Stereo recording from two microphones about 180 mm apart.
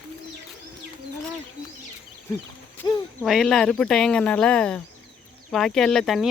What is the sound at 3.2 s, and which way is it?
Speech, centre (ahead or behind).